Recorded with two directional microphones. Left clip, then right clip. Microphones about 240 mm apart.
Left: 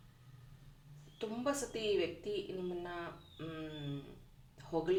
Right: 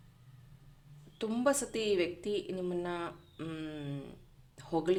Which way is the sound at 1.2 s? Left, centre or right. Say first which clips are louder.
Right 7 dB; right.